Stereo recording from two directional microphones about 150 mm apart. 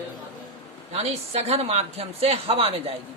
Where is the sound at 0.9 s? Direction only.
45° right (ahead or behind).